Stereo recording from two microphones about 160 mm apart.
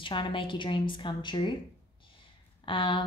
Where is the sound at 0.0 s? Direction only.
30° left (ahead or behind).